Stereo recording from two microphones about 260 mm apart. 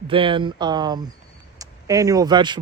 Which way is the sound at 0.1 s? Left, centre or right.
Centre.